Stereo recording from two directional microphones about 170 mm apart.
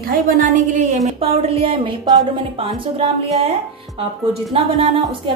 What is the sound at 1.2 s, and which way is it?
A woman's voice, 35° right (ahead or behind).